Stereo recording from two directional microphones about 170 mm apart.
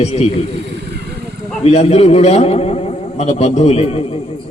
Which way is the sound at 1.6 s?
40° left (ahead or behind).